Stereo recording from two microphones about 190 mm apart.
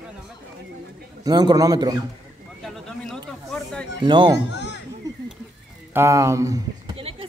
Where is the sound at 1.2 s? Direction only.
20° right (ahead or behind).